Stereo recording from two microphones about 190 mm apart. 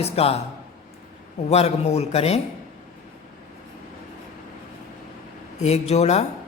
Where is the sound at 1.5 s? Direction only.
35° left (ahead or behind).